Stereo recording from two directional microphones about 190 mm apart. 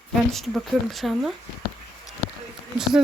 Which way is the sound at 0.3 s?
Centre (ahead or behind).